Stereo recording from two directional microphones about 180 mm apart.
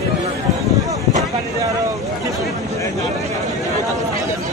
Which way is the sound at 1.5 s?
15° right (ahead or behind).